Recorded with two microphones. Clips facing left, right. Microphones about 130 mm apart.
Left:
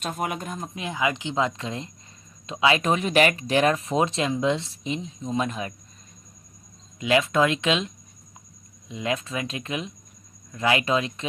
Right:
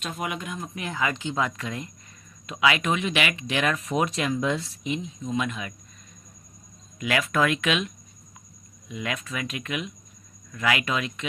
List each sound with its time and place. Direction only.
0.0 s speech: 45° left (ahead or behind)
0.8 s speech: 15° left (ahead or behind); by 5.7 s 35° left (ahead or behind)
7.0 s speech: 25° left (ahead or behind)